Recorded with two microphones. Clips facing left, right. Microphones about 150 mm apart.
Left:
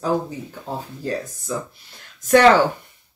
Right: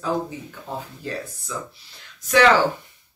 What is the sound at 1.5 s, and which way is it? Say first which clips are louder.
Speech: left 5 dB; 45° left (ahead or behind).